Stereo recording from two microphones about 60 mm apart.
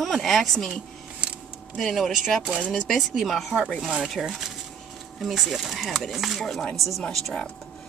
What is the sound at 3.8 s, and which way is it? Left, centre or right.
Speech, centre.